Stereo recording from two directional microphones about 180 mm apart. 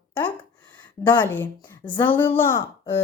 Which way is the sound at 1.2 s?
10° left (ahead or behind).